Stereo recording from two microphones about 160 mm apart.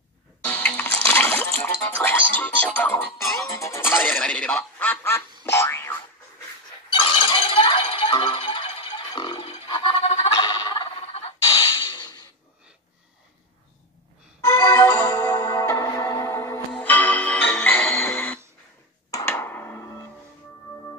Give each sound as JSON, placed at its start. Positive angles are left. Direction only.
{"t": 0.5, "sound": "music", "side_deg": 10}
{"t": 3.4, "sound": "speech", "side_deg": 20}
{"t": 5.4, "sound": "boing", "side_deg": 15}
{"t": 6.9, "sound": "music", "side_deg": 30}
{"t": 11.1, "sound": "a sound", "side_deg": 35}
{"t": 14.4, "sound": "music", "side_deg": 20}